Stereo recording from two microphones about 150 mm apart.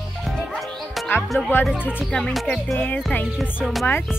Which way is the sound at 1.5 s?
10° left (ahead or behind).